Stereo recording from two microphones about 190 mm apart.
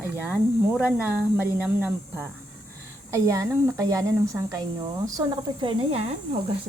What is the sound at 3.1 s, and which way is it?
Speech, 15° right (ahead or behind).